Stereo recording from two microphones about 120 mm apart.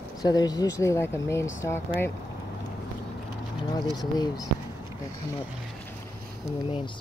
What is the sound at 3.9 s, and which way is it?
Speech, 35° left (ahead or behind).